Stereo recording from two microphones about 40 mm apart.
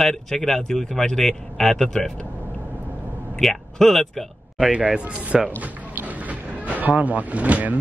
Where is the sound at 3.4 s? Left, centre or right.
Centre.